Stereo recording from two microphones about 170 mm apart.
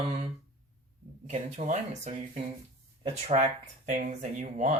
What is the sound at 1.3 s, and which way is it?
Speech, 45° right (ahead or behind).